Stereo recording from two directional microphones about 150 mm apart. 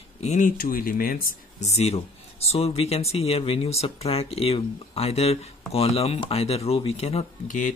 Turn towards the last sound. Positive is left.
turn(degrees=60)  # may be behind; listen again after turning